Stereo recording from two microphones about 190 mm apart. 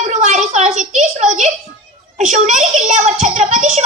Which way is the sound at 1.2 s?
40° right (ahead or behind).